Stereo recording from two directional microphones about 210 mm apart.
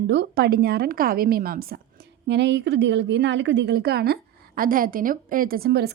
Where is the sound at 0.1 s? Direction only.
55° right (ahead or behind).